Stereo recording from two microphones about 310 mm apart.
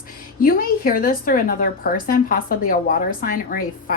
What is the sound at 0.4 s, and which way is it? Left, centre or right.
A woman's voice, left.